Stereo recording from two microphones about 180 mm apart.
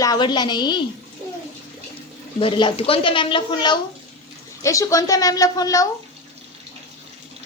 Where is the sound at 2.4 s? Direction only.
30° left (ahead or behind).